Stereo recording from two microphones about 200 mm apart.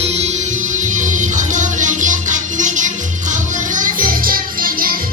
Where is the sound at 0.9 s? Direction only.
40° right (ahead or behind).